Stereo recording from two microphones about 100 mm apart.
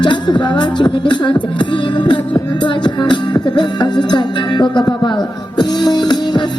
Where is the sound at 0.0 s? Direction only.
50° left (ahead or behind).